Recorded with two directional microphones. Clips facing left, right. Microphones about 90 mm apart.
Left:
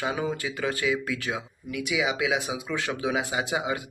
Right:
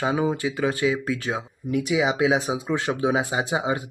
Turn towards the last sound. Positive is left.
turn(degrees=-30)  # may be behind; listen again after turning